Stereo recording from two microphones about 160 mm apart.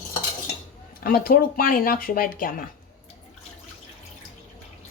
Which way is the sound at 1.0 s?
65° left (ahead or behind).